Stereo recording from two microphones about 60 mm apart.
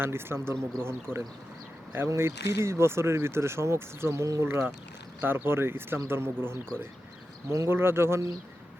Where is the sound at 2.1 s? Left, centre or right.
Right.